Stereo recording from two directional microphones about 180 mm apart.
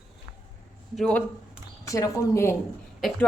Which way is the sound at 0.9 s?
5° left (ahead or behind).